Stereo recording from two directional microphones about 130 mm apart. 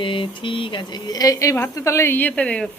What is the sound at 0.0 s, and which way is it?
Speech, 40° left (ahead or behind).